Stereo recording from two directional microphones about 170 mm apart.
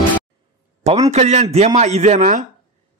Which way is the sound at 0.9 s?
40° right (ahead or behind).